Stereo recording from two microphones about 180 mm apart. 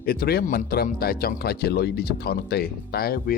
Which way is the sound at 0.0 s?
55° left (ahead or behind).